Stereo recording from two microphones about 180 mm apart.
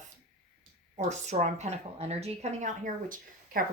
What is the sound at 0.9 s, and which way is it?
Speech, 40° right (ahead or behind).